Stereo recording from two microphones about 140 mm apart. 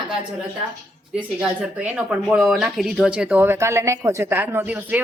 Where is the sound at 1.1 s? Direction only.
10° right (ahead or behind).